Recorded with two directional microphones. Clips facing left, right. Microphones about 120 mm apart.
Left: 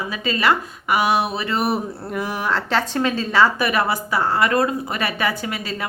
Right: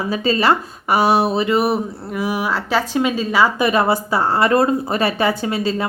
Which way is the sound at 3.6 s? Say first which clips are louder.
Right 4 dB; 25° right (ahead or behind).